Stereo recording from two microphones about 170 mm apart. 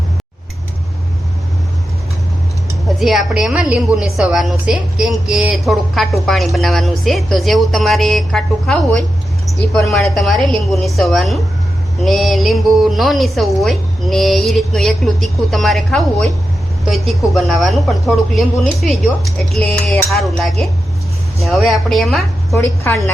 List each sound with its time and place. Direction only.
3.0 s a woman's voice: centre (ahead or behind)
22.5 s a woman's voice: 15° left (ahead or behind)